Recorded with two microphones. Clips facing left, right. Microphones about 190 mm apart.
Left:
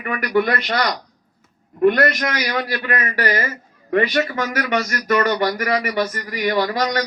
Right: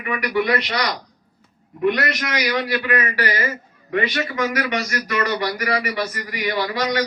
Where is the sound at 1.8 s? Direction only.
45° left (ahead or behind).